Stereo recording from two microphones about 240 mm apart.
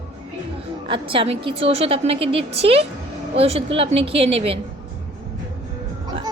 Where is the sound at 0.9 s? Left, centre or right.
Right.